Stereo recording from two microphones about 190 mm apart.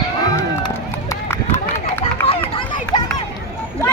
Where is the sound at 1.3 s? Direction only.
10° left (ahead or behind).